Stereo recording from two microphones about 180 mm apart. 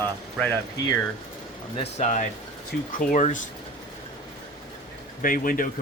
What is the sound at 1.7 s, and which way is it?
Speech, 35° left (ahead or behind).